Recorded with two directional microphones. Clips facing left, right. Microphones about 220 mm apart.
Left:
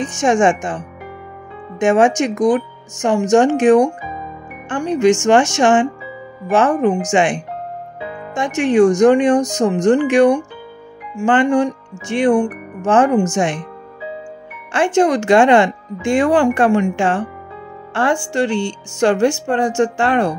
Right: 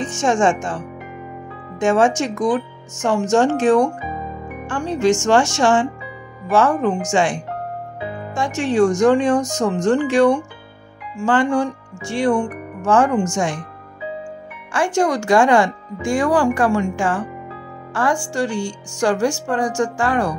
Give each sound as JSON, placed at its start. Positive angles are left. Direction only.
{"t": 0.0, "sound": "speech", "side_deg": 15}
{"t": 14.7, "sound": "speech", "side_deg": 20}